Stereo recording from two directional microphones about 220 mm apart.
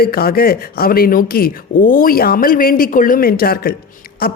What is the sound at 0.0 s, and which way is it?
A woman's voice, 45° left (ahead or behind).